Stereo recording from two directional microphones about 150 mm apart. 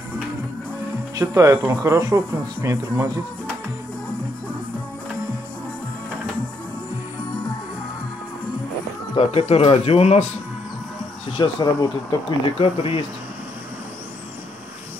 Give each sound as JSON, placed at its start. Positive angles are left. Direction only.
{"t": 1.1, "sound": "speech", "side_deg": -20}
{"t": 9.1, "sound": "speech", "side_deg": 40}
{"t": 11.3, "sound": "speech", "side_deg": 25}
{"t": 12.5, "sound": "speech", "side_deg": 40}